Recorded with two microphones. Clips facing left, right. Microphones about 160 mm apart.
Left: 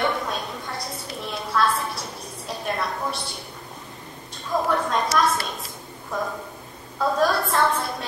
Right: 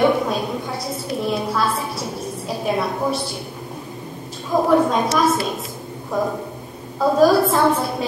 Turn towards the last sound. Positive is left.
turn(degrees=0)  # may be behind; listen again after turning